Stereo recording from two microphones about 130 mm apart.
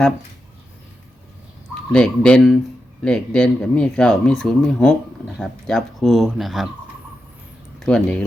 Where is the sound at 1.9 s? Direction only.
5° left (ahead or behind).